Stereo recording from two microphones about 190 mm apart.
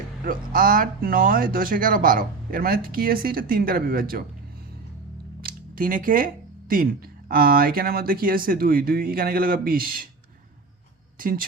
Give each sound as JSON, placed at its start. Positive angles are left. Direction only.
{"t": 0.3, "sound": "speech", "side_deg": -45}
{"t": 5.4, "sound": "a sound", "side_deg": -50}
{"t": 7.3, "sound": "speech", "side_deg": -50}
{"t": 11.2, "sound": "speech", "side_deg": -50}